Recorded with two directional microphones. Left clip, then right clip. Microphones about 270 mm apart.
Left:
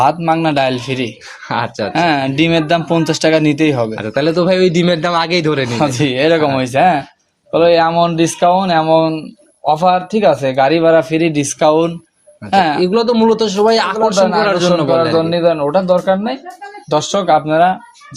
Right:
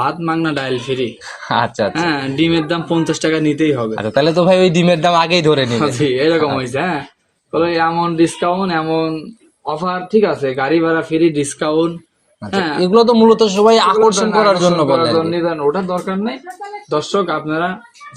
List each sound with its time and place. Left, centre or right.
0.0 s speech: left
1.5 s a man's voice: centre
1.9 s speech: left
3.9 s a man's voice: centre
5.7 s speech: left
12.8 s a man's voice: centre
15.3 s speech: left